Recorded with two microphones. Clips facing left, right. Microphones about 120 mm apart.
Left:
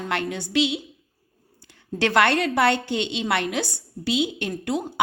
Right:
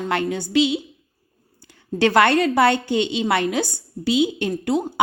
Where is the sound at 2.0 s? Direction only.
40° right (ahead or behind).